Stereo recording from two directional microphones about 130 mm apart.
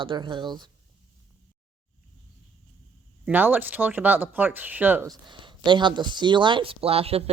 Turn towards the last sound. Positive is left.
turn(degrees=-50)  # may be behind; listen again after turning